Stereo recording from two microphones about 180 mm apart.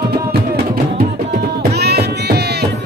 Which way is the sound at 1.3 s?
65° right (ahead or behind).